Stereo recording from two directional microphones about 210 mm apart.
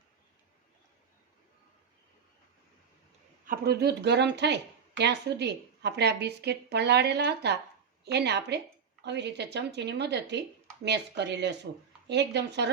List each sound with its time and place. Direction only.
3.4 s a woman's voice: 45° right (ahead or behind)